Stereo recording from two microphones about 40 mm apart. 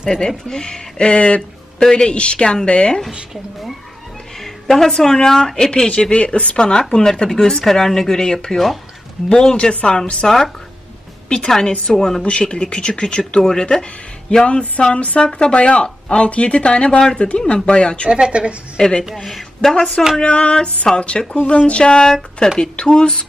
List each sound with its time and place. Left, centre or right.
0.3 s speech: centre
1.4 s speech: centre
4.4 s music: centre
4.9 s speech: centre
6.0 s speech: left
10.2 s speech: centre
11.9 s speech: centre
12.2 s speech: left
14.4 s music: left
15.2 s speech: left
18.1 s a woman's voice: right
18.8 s speech: left
19.1 s speech: centre
20.2 s speech: left